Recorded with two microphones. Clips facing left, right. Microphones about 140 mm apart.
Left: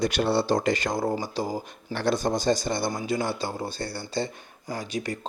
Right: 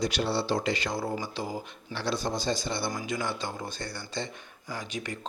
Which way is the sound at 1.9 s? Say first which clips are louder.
Left 6 dB; 50° left (ahead or behind).